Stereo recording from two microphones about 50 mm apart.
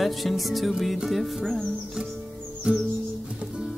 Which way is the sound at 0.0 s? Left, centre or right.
Centre.